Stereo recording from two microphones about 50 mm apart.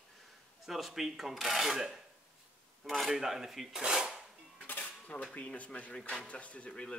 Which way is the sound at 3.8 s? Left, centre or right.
Centre.